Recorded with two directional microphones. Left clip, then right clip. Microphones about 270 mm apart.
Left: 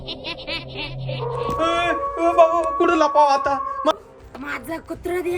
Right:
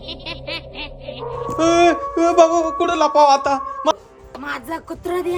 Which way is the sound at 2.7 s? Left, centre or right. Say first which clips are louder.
Even; centre.